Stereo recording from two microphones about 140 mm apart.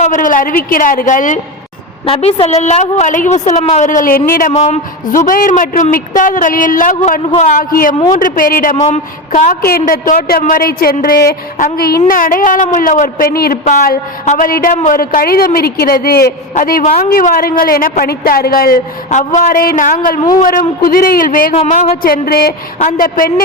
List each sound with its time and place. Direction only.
0.0 s speech: 65° left (ahead or behind)
2.0 s a woman's voice: 45° left (ahead or behind); by 4.2 s 70° left (ahead or behind)
4.3 s a woman's voice: 90° left
4.5 s speech: 50° left (ahead or behind)
5.0 s speech: 75° left (ahead or behind)
7.6 s a woman's voice: 90° left
8.7 s speech: 55° left (ahead or behind)
9.6 s a woman's voice: 90° left
12.0 s a woman's voice: 80° left
20.4 s a woman's voice: 85° left
21.7 s a woman's voice: 80° left